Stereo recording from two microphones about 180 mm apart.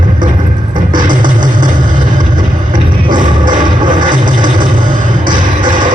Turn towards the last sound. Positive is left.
turn(degrees=-25)  # may be behind; listen again after turning